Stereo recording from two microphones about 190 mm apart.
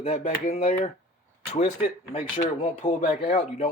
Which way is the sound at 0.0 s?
40° left (ahead or behind).